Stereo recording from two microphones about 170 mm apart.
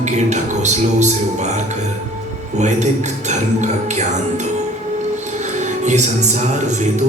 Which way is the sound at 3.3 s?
45° right (ahead or behind).